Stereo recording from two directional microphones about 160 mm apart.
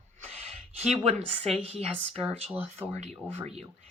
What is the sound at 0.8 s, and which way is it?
Speech, 45° right (ahead or behind).